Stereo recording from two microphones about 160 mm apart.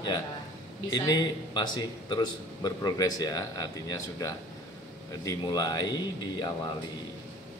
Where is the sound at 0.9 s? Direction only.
25° left (ahead or behind).